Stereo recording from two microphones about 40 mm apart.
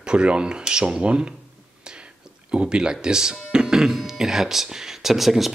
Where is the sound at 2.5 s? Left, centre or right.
Right.